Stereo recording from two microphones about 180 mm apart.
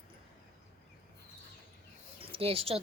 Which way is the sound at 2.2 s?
30° right (ahead or behind).